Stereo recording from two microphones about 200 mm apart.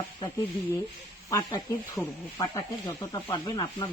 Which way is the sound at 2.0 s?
Centre (ahead or behind).